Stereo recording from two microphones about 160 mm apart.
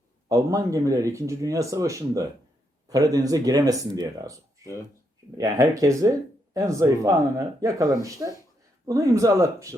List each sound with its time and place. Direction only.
0.3 s speech: 20° right (ahead or behind)
5.4 s speech: 20° right (ahead or behind)